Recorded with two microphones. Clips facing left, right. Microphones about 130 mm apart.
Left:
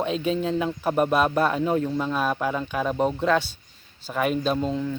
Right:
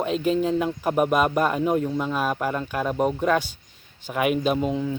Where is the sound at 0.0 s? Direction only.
5° right (ahead or behind).